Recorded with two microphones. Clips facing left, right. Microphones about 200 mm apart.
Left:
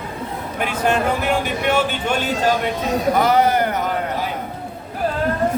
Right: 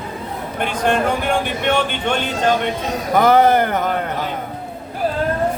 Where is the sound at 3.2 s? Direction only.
50° right (ahead or behind).